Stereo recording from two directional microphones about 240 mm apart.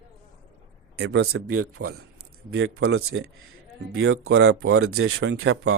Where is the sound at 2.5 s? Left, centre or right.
Right.